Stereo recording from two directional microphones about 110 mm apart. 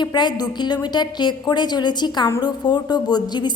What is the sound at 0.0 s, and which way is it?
A woman's voice, 40° left (ahead or behind).